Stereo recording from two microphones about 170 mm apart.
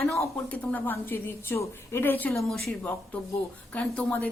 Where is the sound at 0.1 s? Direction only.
10° left (ahead or behind).